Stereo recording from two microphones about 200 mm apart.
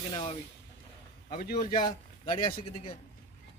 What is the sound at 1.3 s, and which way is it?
Speech, 45° left (ahead or behind).